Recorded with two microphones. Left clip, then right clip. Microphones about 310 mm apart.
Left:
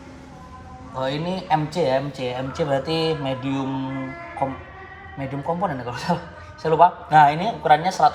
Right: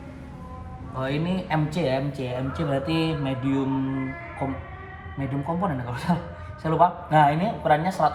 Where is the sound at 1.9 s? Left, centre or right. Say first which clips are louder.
Left 4 dB; centre.